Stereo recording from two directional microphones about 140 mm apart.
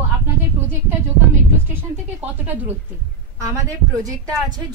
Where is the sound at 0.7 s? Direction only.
15° right (ahead or behind).